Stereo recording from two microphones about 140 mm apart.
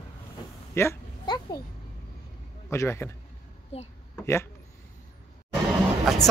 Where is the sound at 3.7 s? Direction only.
45° left (ahead or behind).